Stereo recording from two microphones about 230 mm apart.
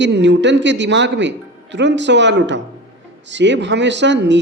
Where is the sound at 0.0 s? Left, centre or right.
Right.